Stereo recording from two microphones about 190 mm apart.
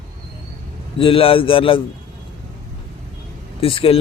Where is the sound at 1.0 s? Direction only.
30° left (ahead or behind).